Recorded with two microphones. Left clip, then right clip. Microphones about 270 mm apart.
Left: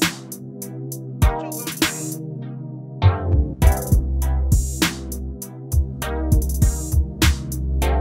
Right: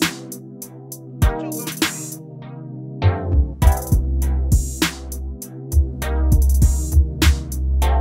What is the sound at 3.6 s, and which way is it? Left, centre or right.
Music, left.